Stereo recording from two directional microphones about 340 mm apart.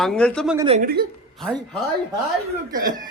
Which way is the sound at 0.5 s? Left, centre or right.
Centre.